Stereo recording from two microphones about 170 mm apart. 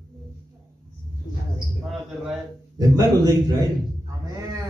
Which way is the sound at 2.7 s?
20° right (ahead or behind).